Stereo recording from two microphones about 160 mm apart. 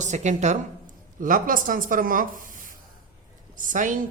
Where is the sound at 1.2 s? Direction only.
55° right (ahead or behind).